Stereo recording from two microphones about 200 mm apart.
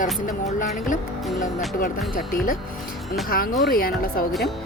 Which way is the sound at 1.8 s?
45° left (ahead or behind).